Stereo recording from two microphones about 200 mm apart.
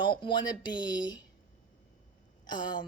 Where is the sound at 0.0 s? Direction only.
25° left (ahead or behind).